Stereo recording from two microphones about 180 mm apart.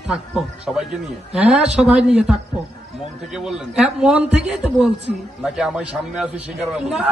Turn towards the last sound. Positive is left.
turn(degrees=0)  # may be behind; listen again after turning